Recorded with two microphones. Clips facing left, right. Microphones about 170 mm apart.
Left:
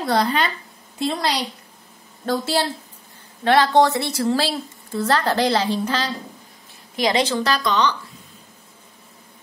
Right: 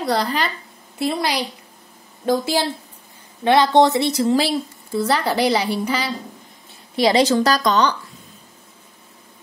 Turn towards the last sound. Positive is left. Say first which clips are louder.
# right 3 dB
turn(degrees=-40)  # may be behind; listen again after turning